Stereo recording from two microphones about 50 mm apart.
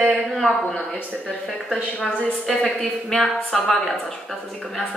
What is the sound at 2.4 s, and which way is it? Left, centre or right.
A woman's voice, centre.